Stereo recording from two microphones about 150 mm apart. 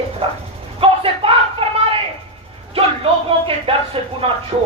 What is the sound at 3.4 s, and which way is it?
Speech, 40° right (ahead or behind).